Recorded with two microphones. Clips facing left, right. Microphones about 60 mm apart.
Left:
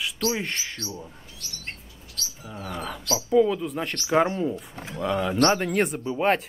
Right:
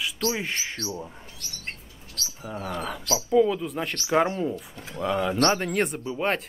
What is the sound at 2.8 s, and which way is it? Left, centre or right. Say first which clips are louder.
Speech: left 2 dB; centre.